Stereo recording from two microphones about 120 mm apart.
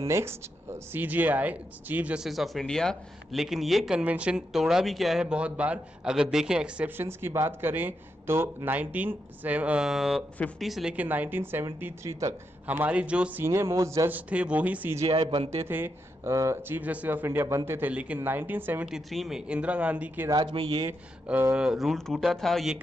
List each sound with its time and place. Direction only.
0.1 s speech: 20° right (ahead or behind)
12.6 s speech: 15° right (ahead or behind)
15.0 s a man's voice: 50° right (ahead or behind)
15.6 s speech: 20° right (ahead or behind)
18.9 s speech: centre (ahead or behind)
20.5 s a man's voice: 50° right (ahead or behind)
21.3 s speech: 15° right (ahead or behind)